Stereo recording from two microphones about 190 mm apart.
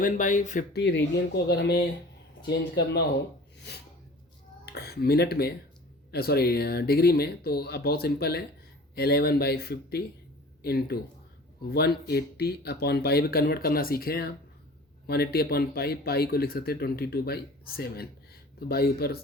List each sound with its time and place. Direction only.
0.0 s speech: 45° left (ahead or behind)
0.7 s speech: 60° left (ahead or behind)
4.6 s speech: 55° left (ahead or behind)